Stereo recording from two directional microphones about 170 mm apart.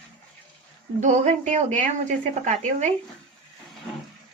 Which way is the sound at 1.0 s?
45° right (ahead or behind).